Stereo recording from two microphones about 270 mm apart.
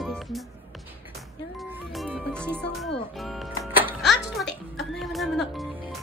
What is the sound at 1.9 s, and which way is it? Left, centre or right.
Music, centre.